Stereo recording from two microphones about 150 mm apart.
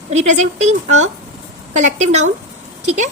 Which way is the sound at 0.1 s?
50° right (ahead or behind).